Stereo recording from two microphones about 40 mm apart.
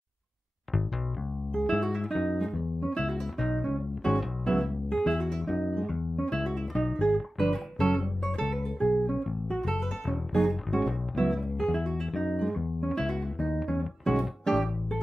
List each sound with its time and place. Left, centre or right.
1.6 s music: centre
6.1 s guitar: centre
7.4 s music: centre
8.5 s guitar: centre
8.9 s music: centre
10.8 s guitar: centre
12.4 s music: centre
12.9 s guitar: centre
13.7 s music: centre